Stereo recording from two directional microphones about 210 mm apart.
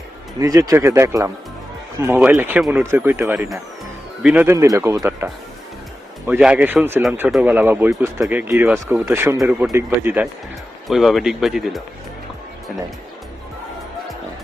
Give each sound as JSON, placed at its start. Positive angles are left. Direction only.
{"t": 0.3, "sound": "speech", "side_deg": -15}